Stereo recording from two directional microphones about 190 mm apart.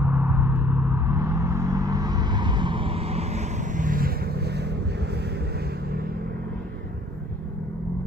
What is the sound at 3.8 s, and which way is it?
Vehicle, 45° right (ahead or behind).